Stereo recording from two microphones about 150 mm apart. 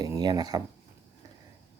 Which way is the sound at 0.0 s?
25° right (ahead or behind).